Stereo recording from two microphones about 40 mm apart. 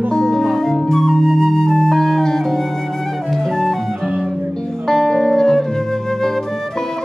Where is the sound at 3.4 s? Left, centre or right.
Centre.